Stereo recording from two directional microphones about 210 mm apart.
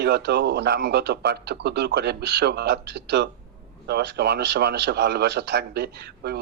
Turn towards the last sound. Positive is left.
turn(degrees=-50)  # may be behind; listen again after turning